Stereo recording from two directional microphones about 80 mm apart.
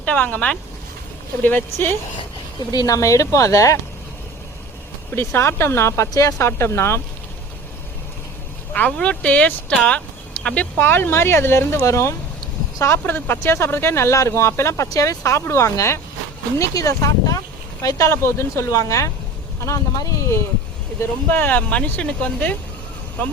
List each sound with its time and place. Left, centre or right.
0.0 s speech: centre
2.7 s speech: left
5.1 s speech: left
8.7 s speech: centre; by 20.4 s left
21.2 s speech: left